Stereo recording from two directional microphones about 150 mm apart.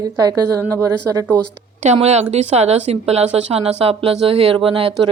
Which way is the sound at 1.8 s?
50° right (ahead or behind).